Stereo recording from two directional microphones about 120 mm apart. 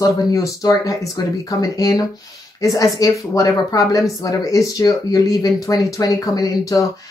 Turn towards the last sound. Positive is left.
turn(degrees=30)  # may be behind; listen again after turning